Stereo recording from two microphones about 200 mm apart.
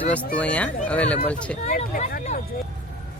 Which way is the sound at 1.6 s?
35° left (ahead or behind).